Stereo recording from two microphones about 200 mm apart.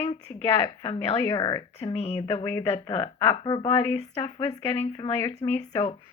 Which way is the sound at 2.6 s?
30° left (ahead or behind).